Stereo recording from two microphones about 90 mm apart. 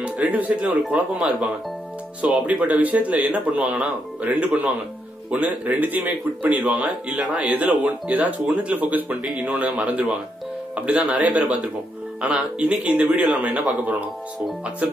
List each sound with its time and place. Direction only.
0.0 s speech: 15° right (ahead or behind)